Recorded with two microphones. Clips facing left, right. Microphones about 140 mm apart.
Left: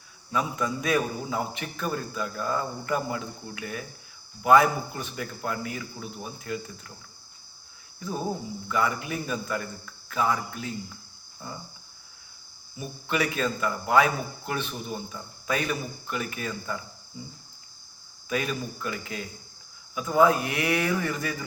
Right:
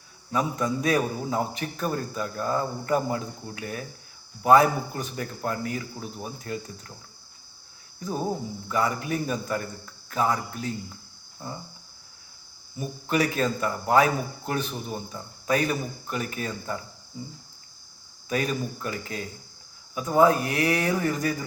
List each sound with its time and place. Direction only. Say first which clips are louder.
0.3 s a man's voice: right 2 dB; 35° right (ahead or behind)
7.9 s a man's voice: right 2 dB; 35° right (ahead or behind)
12.8 s a man's voice: right 3 dB; 40° right (ahead or behind)
18.3 s a man's voice: right 2 dB; 40° right (ahead or behind)